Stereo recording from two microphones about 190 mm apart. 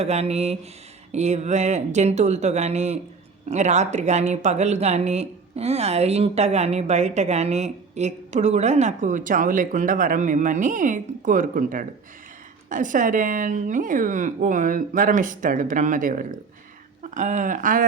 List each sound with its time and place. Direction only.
0.0 s speech: 35° right (ahead or behind)